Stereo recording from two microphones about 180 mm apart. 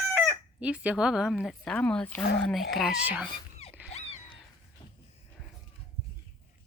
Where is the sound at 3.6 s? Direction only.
35° left (ahead or behind).